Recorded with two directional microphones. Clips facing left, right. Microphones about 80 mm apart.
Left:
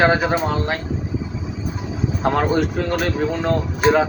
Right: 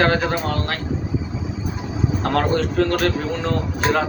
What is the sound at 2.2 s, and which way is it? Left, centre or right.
Speech, centre.